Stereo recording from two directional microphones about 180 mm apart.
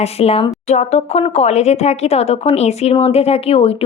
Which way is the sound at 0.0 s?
35° left (ahead or behind).